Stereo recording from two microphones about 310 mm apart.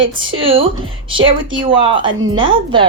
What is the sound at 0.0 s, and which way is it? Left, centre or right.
Speech, right.